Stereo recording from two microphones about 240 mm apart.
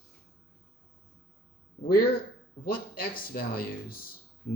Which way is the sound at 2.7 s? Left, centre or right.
Left.